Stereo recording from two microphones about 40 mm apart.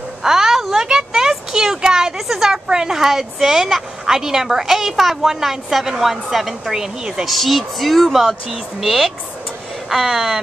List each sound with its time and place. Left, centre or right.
0.2 s a sound: centre
2.2 s speech: centre
7.2 s speech: centre